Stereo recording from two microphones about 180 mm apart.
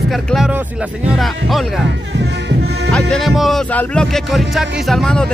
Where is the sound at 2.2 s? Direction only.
70° right (ahead or behind).